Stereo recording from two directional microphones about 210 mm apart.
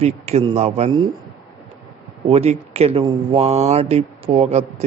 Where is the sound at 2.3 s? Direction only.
30° right (ahead or behind).